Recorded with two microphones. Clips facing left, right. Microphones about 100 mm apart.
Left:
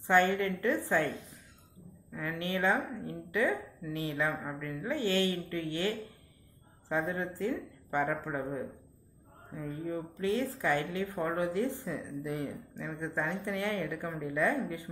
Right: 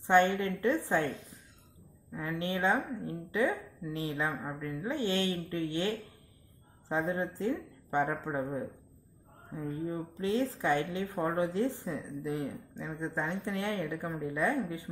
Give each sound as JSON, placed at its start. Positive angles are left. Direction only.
{"t": 0.0, "sound": "a woman's voice", "side_deg": -15}
{"t": 2.2, "sound": "a woman's voice", "side_deg": -20}
{"t": 9.5, "sound": "a woman's voice", "side_deg": -25}